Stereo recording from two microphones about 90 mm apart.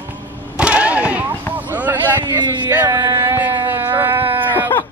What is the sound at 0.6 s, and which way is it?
Vehicle, 15° right (ahead or behind).